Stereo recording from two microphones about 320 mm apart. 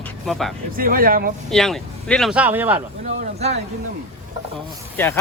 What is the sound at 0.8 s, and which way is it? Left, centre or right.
Speech, right.